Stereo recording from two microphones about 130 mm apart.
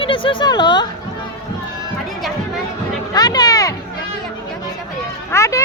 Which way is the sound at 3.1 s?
30° left (ahead or behind).